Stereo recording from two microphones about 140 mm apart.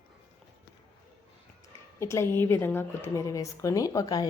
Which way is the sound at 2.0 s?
20° left (ahead or behind).